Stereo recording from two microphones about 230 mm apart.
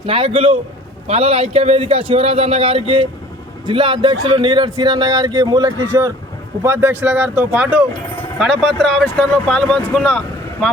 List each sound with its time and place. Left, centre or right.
0.0 s a man's voice: right; by 10.7 s centre